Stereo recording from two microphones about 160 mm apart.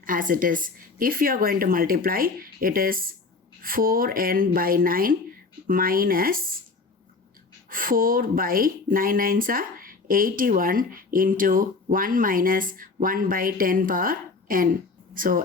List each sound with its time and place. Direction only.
0.0 s speech: 60° right (ahead or behind)
7.7 s speech: 60° right (ahead or behind)